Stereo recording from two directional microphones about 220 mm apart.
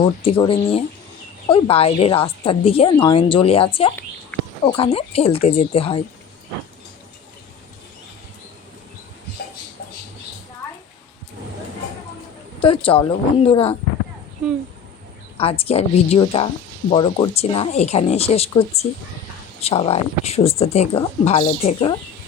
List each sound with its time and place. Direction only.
0.0 s a woman's voice: 25° left (ahead or behind)
12.5 s a woman's voice: 25° left (ahead or behind)
15.4 s a woman's voice: 25° left (ahead or behind)